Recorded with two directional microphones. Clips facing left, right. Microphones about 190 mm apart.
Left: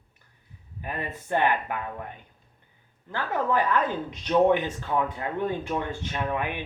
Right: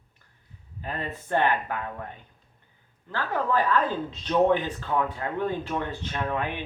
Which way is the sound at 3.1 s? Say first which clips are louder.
Even; 15° left (ahead or behind).